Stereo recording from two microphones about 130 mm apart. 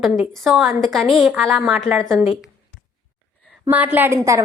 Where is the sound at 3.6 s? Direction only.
10° right (ahead or behind).